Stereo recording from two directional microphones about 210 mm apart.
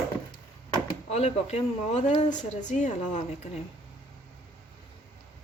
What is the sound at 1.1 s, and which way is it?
Speech, 30° left (ahead or behind).